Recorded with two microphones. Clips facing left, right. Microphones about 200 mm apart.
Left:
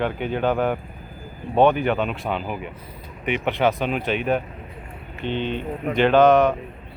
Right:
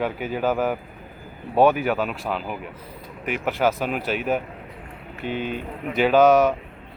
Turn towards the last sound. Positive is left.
turn(degrees=-5)  # may be behind; listen again after turning